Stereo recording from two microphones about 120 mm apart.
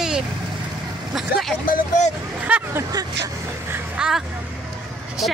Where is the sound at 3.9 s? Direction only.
5° right (ahead or behind).